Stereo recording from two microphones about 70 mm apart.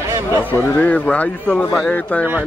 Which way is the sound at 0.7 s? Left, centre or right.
Left.